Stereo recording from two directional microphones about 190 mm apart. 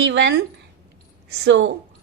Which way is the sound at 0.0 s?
70° right (ahead or behind).